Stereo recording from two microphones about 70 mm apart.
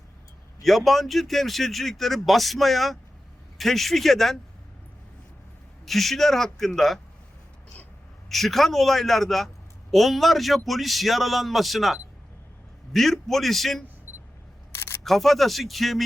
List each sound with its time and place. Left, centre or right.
0.6 s speech: centre
5.8 s speech: centre
8.3 s speech: centre
14.1 s a sound: right
14.7 s single-lens reflex camera: left
15.0 s speech: centre